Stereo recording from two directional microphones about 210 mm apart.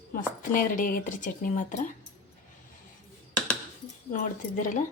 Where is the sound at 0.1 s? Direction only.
40° left (ahead or behind).